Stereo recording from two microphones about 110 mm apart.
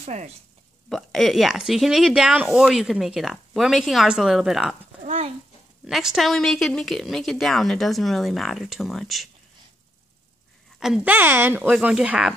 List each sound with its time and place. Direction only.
0.0 s speech: 90° right
0.8 s speech: centre (ahead or behind)
5.9 s speech: 5° right (ahead or behind)
11.1 s speech: 15° right (ahead or behind)
11.7 s speech: 10° right (ahead or behind)